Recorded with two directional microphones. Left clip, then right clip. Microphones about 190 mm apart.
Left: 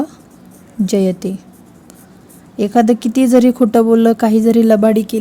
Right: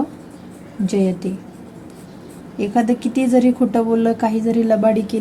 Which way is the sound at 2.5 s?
65° left (ahead or behind).